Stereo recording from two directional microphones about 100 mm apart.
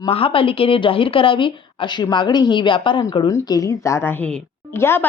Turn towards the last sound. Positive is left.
turn(degrees=25)  # may be behind; listen again after turning